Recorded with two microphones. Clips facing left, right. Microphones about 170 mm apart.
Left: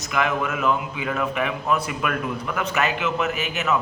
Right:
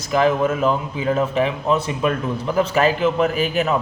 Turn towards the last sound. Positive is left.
turn(degrees=-35)  # may be behind; listen again after turning